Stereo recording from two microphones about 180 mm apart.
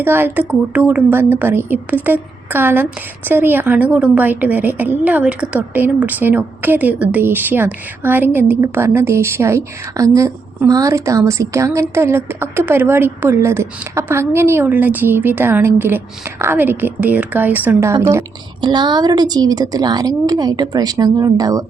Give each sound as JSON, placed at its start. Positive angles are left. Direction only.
{"t": 0.0, "sound": "a woman's voice", "side_deg": -10}